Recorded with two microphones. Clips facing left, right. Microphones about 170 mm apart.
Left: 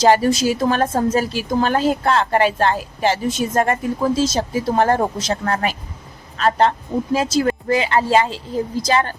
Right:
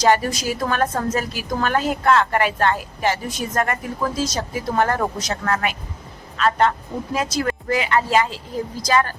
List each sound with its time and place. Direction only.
0.0 s a woman's voice: 30° left (ahead or behind)